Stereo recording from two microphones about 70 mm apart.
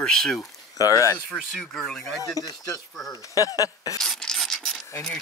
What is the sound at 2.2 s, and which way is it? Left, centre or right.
Speech, left.